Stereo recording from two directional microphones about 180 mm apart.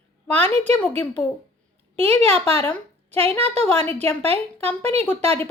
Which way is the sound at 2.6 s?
10° left (ahead or behind).